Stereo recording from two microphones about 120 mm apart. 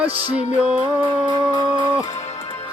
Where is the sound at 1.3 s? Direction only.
40° right (ahead or behind).